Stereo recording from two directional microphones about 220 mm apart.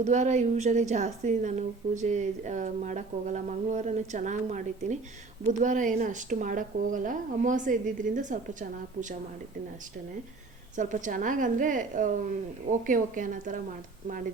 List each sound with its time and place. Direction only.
0.0 s a woman's voice: 35° right (ahead or behind)
10.8 s a woman's voice: 35° right (ahead or behind)